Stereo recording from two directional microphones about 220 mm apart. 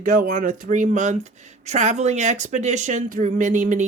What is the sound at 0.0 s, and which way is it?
Speech, 40° right (ahead or behind).